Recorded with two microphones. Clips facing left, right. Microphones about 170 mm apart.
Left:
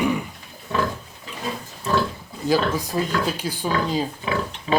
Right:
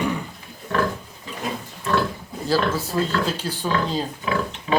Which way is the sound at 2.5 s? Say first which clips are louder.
Left 1 dB; 15° left (ahead or behind).